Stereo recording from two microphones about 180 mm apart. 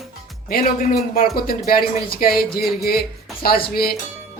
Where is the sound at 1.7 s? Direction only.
55° left (ahead or behind).